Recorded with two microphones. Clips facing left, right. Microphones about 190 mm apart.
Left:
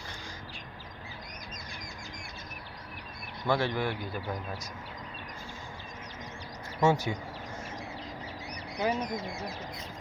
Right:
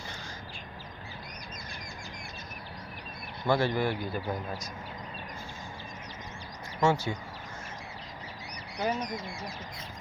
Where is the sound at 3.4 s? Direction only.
Centre (ahead or behind).